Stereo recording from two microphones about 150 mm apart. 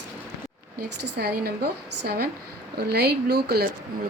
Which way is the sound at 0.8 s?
90° right.